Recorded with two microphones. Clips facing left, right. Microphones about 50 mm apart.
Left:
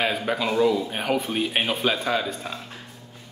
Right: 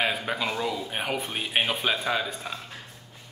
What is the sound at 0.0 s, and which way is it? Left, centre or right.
Speech, centre.